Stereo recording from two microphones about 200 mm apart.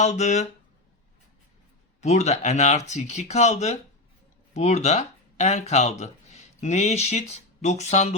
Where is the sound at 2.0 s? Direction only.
35° left (ahead or behind).